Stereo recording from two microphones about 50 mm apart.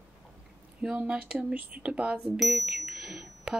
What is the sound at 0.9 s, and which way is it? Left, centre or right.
Speech, right.